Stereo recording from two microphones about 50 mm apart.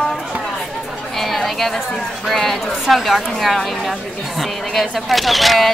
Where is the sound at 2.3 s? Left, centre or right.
Centre.